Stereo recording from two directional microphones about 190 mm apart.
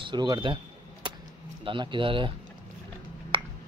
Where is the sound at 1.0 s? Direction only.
25° right (ahead or behind).